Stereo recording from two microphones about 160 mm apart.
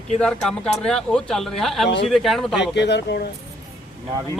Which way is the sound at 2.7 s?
90° left.